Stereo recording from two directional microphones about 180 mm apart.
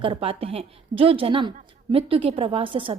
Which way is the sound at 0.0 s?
30° right (ahead or behind).